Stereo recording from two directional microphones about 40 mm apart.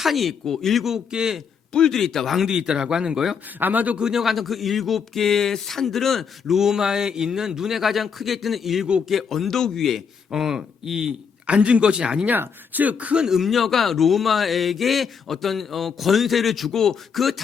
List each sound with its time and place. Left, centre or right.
0.0 s speech: centre
0.9 s a man's voice: centre
1.9 s speech: centre
2.3 s a man's voice: centre
3.6 s speech: right
3.9 s speech: centre
6.5 s a man's voice: centre
10.3 s a man's voice: centre
11.4 s speech: right
12.3 s speech: right
13.1 s a man's voice: centre
13.4 s speech: centre